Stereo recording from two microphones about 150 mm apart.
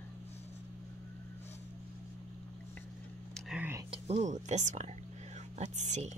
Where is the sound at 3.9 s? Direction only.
50° right (ahead or behind).